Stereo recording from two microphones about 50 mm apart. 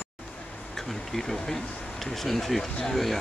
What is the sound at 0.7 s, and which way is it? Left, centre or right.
Bee, centre.